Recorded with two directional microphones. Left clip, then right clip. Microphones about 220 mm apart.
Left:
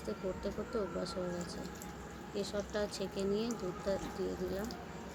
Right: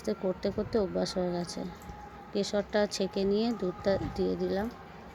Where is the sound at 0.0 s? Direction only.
30° right (ahead or behind).